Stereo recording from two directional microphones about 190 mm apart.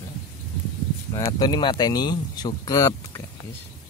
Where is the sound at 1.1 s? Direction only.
20° left (ahead or behind).